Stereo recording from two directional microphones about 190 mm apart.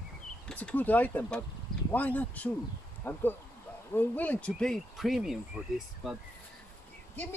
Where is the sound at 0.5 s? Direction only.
5° left (ahead or behind).